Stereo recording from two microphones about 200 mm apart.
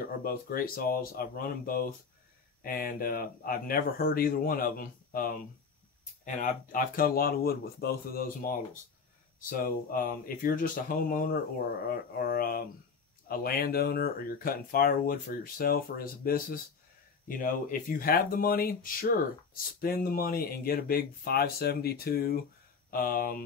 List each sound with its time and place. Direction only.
0.0 s speech: 50° left (ahead or behind)